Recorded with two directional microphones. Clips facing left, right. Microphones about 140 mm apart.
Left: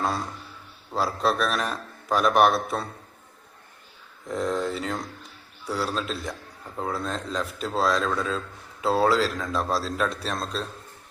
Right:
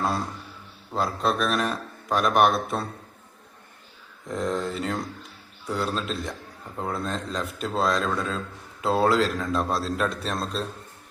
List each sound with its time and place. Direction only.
0.9 s a man's voice: centre (ahead or behind)
4.3 s a man's voice: centre (ahead or behind)